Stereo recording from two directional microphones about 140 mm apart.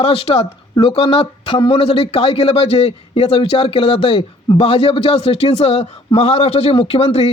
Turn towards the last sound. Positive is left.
turn(degrees=45)  # may be behind; listen again after turning